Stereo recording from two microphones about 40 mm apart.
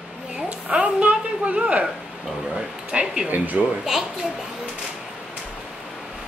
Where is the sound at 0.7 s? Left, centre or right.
Right.